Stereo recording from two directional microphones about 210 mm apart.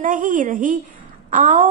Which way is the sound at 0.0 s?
40° right (ahead or behind).